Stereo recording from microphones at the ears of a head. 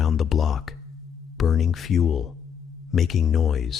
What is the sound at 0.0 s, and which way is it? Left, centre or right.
Speech, left.